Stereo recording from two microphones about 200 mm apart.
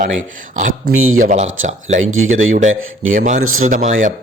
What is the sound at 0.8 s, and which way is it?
Speech, 90° right.